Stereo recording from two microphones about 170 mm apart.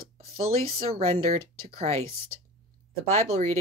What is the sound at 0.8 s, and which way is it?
Speech, 35° right (ahead or behind).